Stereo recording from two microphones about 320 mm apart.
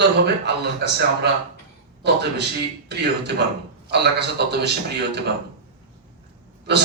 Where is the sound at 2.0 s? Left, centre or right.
Right.